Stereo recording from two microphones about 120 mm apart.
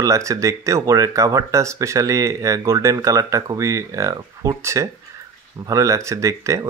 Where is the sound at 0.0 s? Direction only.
25° right (ahead or behind).